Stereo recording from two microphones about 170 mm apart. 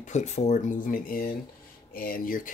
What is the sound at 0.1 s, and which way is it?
Speech, 40° left (ahead or behind).